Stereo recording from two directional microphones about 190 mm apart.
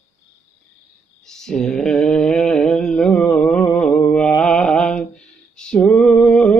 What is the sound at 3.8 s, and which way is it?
Mantra, 5° left (ahead or behind).